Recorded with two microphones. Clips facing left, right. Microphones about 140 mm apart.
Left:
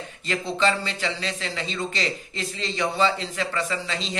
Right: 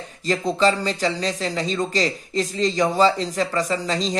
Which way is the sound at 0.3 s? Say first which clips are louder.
Right 4 dB; 40° right (ahead or behind).